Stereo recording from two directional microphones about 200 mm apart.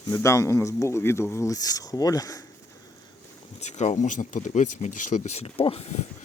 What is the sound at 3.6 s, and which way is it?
Speech, 35° left (ahead or behind).